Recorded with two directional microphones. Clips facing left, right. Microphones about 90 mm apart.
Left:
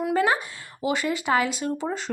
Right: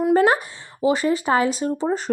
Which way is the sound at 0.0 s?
35° right (ahead or behind).